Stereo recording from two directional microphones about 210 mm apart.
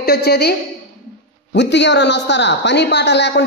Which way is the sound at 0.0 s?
50° left (ahead or behind).